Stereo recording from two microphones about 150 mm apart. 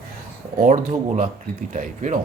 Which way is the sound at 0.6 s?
60° right (ahead or behind).